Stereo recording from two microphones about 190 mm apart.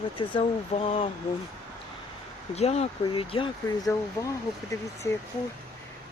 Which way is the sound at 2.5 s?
35° left (ahead or behind).